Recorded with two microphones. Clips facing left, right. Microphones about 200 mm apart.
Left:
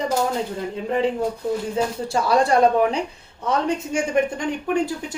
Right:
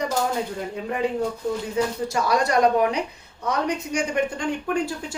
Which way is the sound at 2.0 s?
30° left (ahead or behind).